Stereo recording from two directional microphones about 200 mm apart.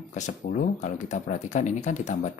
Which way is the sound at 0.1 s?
40° left (ahead or behind).